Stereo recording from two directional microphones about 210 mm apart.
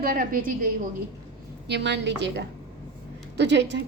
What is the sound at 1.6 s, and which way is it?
A woman's voice, 55° right (ahead or behind).